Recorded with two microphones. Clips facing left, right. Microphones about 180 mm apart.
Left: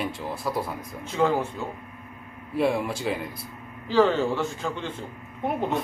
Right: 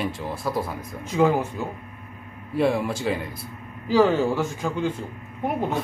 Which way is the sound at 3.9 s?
10° right (ahead or behind).